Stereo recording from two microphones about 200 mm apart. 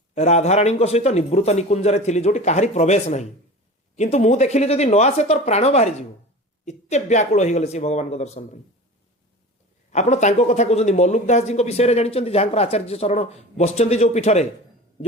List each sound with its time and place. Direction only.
0.1 s speech: 35° left (ahead or behind)
9.9 s speech: 35° left (ahead or behind)